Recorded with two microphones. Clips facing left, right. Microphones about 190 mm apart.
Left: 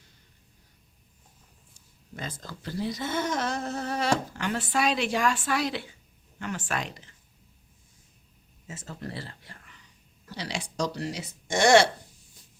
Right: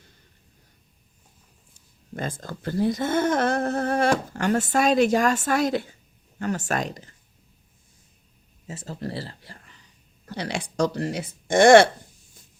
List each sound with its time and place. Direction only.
2.1 s speech: 50° right (ahead or behind)
8.6 s speech: 35° right (ahead or behind)
10.2 s speech: 55° right (ahead or behind)